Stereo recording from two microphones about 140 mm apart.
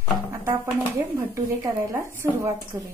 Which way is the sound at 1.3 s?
20° right (ahead or behind).